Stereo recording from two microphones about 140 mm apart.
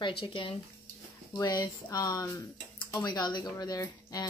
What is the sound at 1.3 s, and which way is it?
A woman's voice, 25° left (ahead or behind).